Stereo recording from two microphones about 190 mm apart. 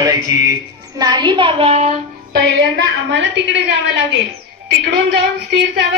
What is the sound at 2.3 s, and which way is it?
Music, 60° right (ahead or behind).